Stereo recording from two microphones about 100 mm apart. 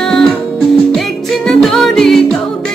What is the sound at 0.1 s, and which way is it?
Music, 5° left (ahead or behind).